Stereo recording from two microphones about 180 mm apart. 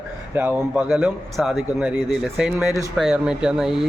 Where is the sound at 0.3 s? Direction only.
10° right (ahead or behind).